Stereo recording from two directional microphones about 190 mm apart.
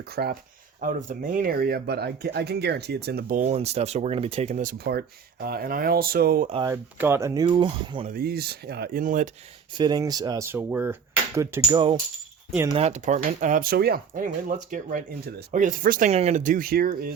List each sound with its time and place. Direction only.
0.1 s speech: 55° right (ahead or behind)
0.8 s speech: 45° right (ahead or behind)
4.8 s speech: 55° right (ahead or behind)
6.7 s speech: 15° right (ahead or behind)
8.0 s speech: 50° right (ahead or behind)
9.7 s speech: 20° right (ahead or behind)
12.7 s speech: 35° right (ahead or behind); by 17.1 s 50° right (ahead or behind)